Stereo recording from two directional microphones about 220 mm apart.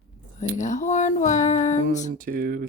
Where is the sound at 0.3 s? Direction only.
35° left (ahead or behind).